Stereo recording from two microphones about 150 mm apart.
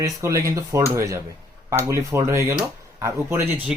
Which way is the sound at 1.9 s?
20° right (ahead or behind).